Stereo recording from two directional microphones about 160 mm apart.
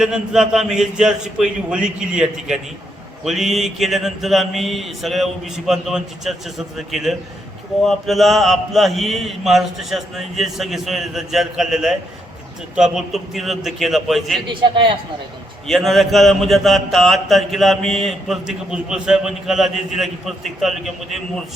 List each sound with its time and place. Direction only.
0.0 s a man's voice: 5° right (ahead or behind)
14.4 s a man's voice: 30° right (ahead or behind)
15.6 s a man's voice: centre (ahead or behind)